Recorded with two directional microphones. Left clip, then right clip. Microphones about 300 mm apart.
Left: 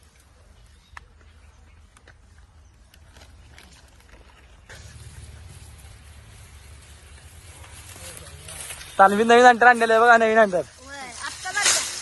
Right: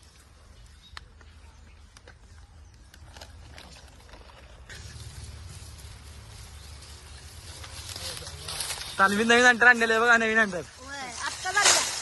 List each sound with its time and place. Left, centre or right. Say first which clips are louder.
9.0 s a man's voice: left 6 dB; centre
10.8 s snake: even; centre
11.3 s snake: even; right